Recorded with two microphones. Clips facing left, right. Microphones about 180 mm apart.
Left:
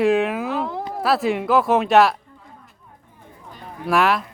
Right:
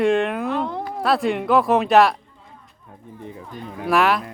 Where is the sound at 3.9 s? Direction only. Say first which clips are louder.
Even; centre (ahead or behind).